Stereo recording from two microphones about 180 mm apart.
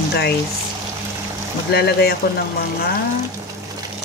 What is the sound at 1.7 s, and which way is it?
Speech, 60° left (ahead or behind).